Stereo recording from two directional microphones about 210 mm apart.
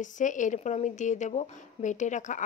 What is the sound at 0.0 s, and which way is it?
A woman's voice, 35° left (ahead or behind).